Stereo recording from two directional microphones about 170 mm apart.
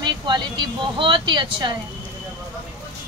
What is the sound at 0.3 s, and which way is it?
Speech, 25° right (ahead or behind).